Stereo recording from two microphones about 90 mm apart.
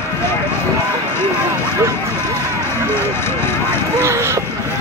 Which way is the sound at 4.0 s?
30° right (ahead or behind).